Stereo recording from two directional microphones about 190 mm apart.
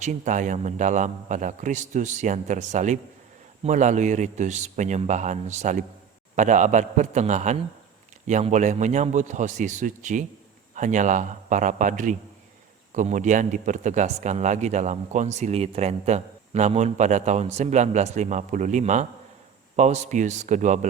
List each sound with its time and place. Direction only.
0.0 s speech: 40° right (ahead or behind)